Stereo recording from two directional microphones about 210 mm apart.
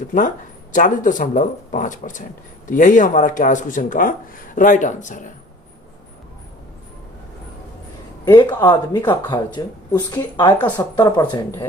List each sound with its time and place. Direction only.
0.7 s speech: 40° left (ahead or behind)
8.3 s speech: 20° left (ahead or behind)